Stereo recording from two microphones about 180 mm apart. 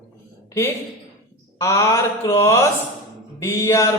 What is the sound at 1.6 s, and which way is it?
Mantra, 15° left (ahead or behind).